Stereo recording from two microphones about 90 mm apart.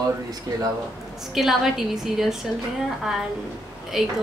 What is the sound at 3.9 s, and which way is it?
Speech, 5° right (ahead or behind).